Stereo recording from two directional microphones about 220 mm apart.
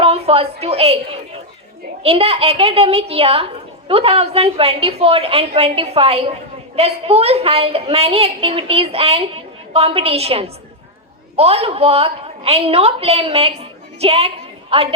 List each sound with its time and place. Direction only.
0.0 s a sound: 25° right (ahead or behind)
0.6 s a woman's voice: 25° right (ahead or behind)
2.0 s a woman's voice: 25° right (ahead or behind)